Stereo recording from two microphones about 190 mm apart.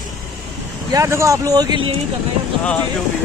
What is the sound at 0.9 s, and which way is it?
Speech, 15° right (ahead or behind).